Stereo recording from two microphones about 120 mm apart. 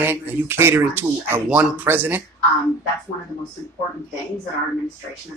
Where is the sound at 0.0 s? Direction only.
20° right (ahead or behind).